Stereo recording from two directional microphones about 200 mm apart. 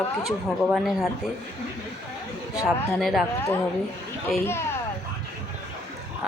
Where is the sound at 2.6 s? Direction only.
Centre (ahead or behind).